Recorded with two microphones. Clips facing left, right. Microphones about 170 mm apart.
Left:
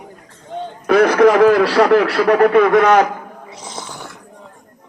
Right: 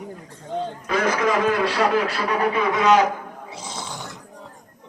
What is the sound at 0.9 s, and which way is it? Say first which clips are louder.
Speech: left 11 dB; 70° left (ahead or behind).